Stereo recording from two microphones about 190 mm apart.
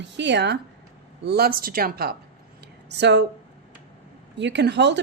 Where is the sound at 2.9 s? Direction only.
65° right (ahead or behind).